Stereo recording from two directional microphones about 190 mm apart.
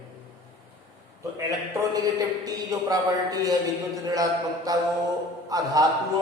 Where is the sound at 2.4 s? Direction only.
20° right (ahead or behind).